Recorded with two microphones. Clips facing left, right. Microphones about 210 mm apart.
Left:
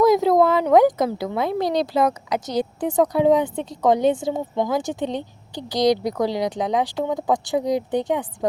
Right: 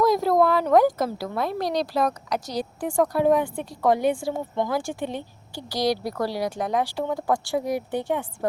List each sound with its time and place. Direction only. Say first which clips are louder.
0.1 s speech: left 4 dB; 20° left (ahead or behind)